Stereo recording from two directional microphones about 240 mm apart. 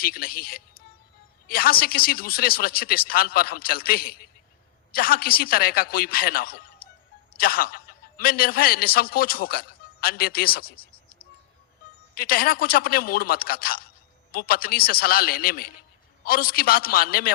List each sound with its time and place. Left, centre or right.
0.0 s a man's voice: left